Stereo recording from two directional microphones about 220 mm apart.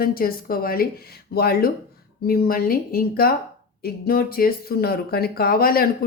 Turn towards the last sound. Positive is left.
turn(degrees=40)  # may be behind; listen again after turning